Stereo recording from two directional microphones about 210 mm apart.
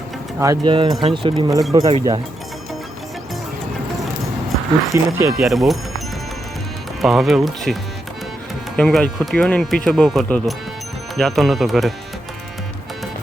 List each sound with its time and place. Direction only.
0.3 s speech: 15° right (ahead or behind)
4.9 s speech: 10° right (ahead or behind)
5.4 s speech: centre (ahead or behind)
7.0 s speech: centre (ahead or behind)